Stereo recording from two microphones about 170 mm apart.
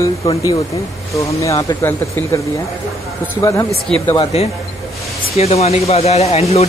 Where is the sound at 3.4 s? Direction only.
20° left (ahead or behind).